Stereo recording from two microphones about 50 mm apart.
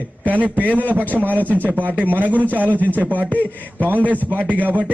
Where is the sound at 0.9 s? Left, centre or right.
Right.